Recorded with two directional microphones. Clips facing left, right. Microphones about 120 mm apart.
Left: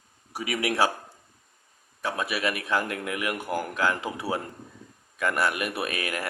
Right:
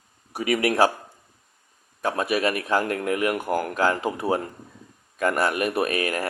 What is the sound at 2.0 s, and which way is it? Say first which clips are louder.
A man's voice: right 5 dB; 45° right (ahead or behind).